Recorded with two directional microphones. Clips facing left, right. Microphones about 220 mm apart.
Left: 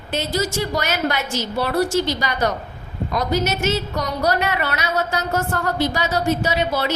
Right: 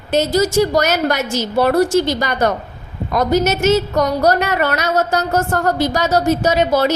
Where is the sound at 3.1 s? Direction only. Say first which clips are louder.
Right 6 dB; 45° right (ahead or behind).